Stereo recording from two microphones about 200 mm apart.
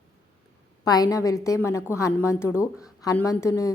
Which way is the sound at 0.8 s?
20° left (ahead or behind).